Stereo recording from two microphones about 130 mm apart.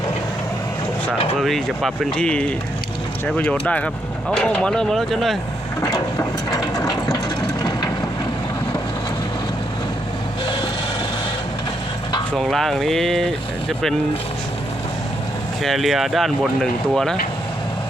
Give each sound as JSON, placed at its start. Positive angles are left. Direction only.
{"t": 1.4, "sound": "speech", "side_deg": 0}
{"t": 6.5, "sound": "mechanisms", "side_deg": 25}
{"t": 12.4, "sound": "speech", "side_deg": 0}
{"t": 15.6, "sound": "speech", "side_deg": 0}